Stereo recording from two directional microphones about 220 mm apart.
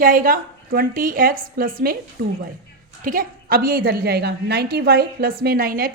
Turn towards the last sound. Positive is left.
turn(degrees=-40)  # may be behind; listen again after turning